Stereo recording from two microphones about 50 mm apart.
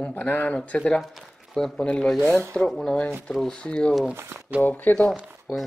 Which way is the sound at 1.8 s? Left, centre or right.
Centre.